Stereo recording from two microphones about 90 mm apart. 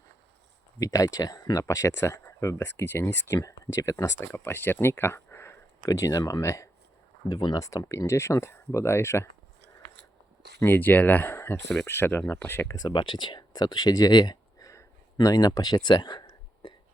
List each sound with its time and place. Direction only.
0.8 s speech: 45° left (ahead or behind)
1.6 s speech: 35° left (ahead or behind)
7.3 s speech: 50° left (ahead or behind)
7.9 s speech: 30° left (ahead or behind)
10.6 s speech: 20° left (ahead or behind)
12.7 s speech: 55° left (ahead or behind)
14.7 s speech: 40° left (ahead or behind); by 16.2 s 55° left (ahead or behind)
16.6 s a sound: 75° left (ahead or behind)